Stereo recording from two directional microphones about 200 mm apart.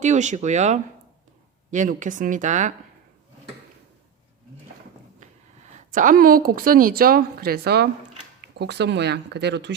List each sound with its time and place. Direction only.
0.0 s speech: 35° right (ahead or behind)
5.9 s a woman's voice: 40° right (ahead or behind); by 9.7 s 60° right (ahead or behind)